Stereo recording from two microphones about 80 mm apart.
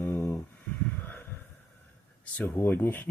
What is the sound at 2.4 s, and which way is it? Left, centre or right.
Speech, left.